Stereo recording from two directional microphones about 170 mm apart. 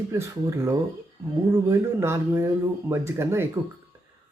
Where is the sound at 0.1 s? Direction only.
15° right (ahead or behind).